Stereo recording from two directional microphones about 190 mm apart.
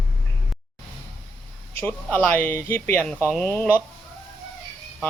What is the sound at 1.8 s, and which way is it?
Speech, 10° left (ahead or behind).